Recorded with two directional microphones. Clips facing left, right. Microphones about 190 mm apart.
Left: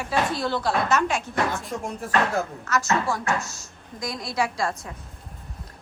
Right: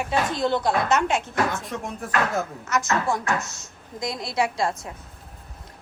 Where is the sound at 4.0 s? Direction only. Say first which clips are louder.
Right 2 dB; 25° right (ahead or behind).